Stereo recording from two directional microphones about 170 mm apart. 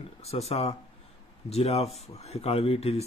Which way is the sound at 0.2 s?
40° left (ahead or behind).